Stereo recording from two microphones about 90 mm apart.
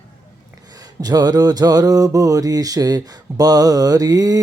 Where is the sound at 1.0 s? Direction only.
45° right (ahead or behind).